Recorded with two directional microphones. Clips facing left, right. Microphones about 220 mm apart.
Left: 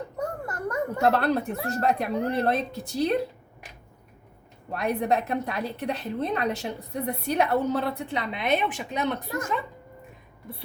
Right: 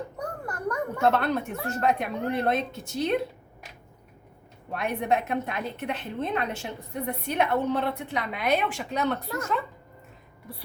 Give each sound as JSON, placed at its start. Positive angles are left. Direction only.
{"t": 0.2, "sound": "a child's voice", "side_deg": 25}
{"t": 4.7, "sound": "a woman's voice", "side_deg": 35}